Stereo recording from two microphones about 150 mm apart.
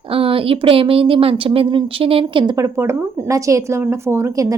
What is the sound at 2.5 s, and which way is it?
Speech, 20° right (ahead or behind).